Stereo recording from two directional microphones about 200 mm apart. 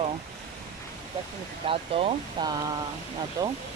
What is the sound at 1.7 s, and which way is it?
Speech, 25° right (ahead or behind).